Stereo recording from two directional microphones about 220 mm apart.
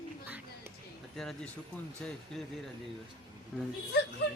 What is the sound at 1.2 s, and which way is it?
Speech, centre (ahead or behind).